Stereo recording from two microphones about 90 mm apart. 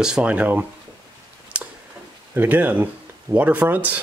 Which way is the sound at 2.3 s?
20° right (ahead or behind).